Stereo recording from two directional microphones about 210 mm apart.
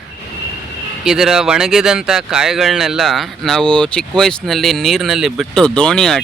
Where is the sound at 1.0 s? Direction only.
5° right (ahead or behind).